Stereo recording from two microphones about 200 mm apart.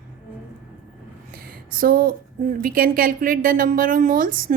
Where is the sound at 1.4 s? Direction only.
45° right (ahead or behind).